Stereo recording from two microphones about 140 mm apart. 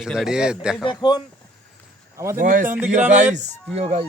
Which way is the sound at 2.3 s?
80° right.